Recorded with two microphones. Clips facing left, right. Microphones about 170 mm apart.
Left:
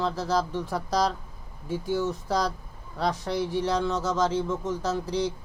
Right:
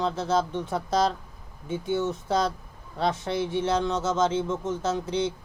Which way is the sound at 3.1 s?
Centre (ahead or behind).